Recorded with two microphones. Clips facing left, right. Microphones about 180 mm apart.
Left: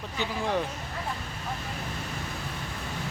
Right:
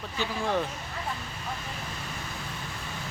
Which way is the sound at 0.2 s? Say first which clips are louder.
Even; 15° left (ahead or behind).